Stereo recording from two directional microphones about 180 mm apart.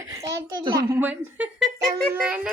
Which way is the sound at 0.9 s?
10° right (ahead or behind).